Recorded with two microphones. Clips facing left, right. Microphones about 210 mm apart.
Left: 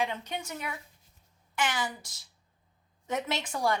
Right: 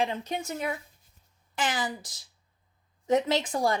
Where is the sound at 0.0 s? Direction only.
35° right (ahead or behind).